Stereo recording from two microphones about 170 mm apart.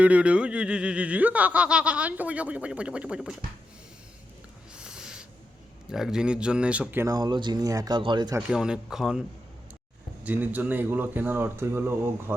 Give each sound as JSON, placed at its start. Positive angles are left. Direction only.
{"t": 0.0, "sound": "speech", "side_deg": -5}
{"t": 4.8, "sound": "owl", "side_deg": -5}
{"t": 5.9, "sound": "speech", "side_deg": -5}
{"t": 8.4, "sound": "speech", "side_deg": -5}
{"t": 10.2, "sound": "speech", "side_deg": -10}